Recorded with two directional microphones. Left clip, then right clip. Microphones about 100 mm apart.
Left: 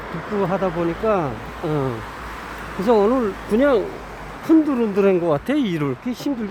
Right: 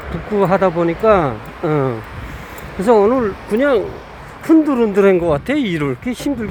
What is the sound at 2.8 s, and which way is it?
Speech, 25° right (ahead or behind).